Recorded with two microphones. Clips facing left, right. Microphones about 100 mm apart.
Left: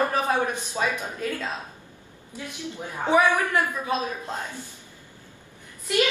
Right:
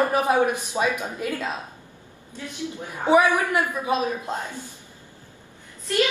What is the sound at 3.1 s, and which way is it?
A woman's voice, 15° right (ahead or behind).